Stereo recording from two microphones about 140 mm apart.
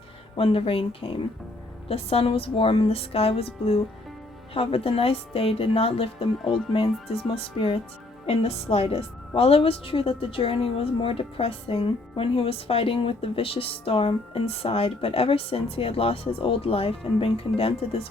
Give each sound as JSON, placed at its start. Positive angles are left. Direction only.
{"t": 0.3, "sound": "a woman's voice", "side_deg": 40}